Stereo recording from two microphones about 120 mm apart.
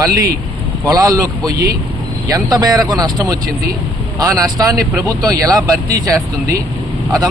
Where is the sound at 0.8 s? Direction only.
30° right (ahead or behind).